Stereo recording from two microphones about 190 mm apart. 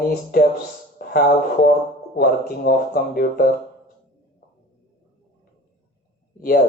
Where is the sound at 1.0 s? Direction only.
50° left (ahead or behind).